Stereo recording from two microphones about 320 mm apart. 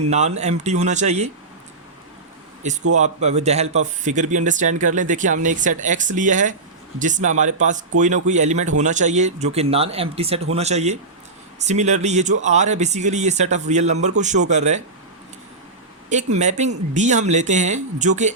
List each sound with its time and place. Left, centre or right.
0.1 s speech: right
2.9 s speech: right
16.0 s speech: right